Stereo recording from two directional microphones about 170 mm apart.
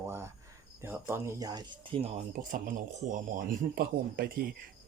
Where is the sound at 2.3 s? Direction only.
50° right (ahead or behind).